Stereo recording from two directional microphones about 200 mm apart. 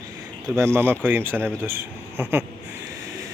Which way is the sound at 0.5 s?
15° right (ahead or behind).